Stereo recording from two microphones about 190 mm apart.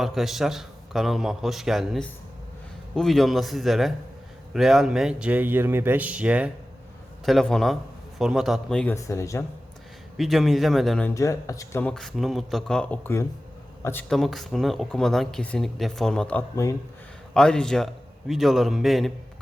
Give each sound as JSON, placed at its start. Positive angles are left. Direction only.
{"t": 0.0, "sound": "speech", "side_deg": 0}
{"t": 9.0, "sound": "speech", "side_deg": 15}
{"t": 10.2, "sound": "speech", "side_deg": 0}
{"t": 11.1, "sound": "speech", "side_deg": 15}